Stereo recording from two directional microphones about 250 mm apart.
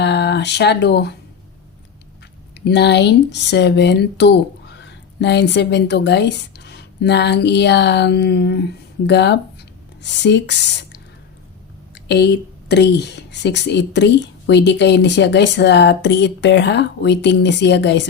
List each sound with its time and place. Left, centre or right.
0.0 s a sound: left
2.6 s speech: left
11.9 s a woman's voice: left